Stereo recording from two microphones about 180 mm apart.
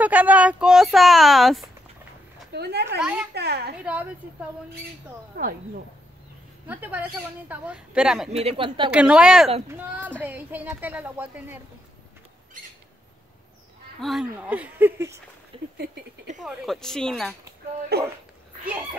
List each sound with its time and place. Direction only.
0.0 s speech: 10° right (ahead or behind)
2.5 s speech: 65° right (ahead or behind)
3.0 s speech: 5° right (ahead or behind)
3.3 s a woman's voice: 65° right (ahead or behind)
3.7 s speech: 5° right (ahead or behind)
5.4 s a woman's voice: 65° right (ahead or behind)
6.7 s speech: 10° right (ahead or behind)
8.3 s speech: 35° right (ahead or behind)
8.9 s speech: 5° right (ahead or behind)
14.0 s speech: 5° right (ahead or behind)
15.5 s a sound: 30° right (ahead or behind)
16.4 s speech: centre (ahead or behind)
17.9 s a woman's voice: 60° right (ahead or behind)